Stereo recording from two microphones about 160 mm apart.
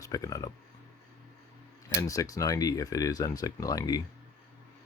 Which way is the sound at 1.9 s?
20° left (ahead or behind).